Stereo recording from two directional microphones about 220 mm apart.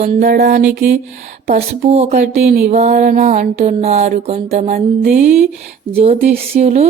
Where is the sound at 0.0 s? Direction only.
35° right (ahead or behind).